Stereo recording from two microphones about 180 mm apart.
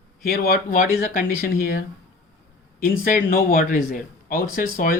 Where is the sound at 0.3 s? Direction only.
55° left (ahead or behind).